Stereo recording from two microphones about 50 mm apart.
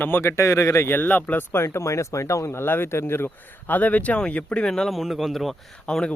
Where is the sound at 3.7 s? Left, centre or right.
Left.